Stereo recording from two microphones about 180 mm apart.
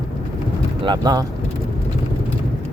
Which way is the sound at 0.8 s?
25° right (ahead or behind).